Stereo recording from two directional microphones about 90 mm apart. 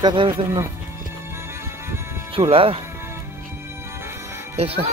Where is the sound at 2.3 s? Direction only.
90° right.